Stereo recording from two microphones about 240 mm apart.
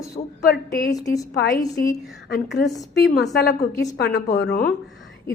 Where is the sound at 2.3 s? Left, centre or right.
Left.